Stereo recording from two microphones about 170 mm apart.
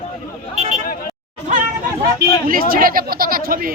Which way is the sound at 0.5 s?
45° right (ahead or behind).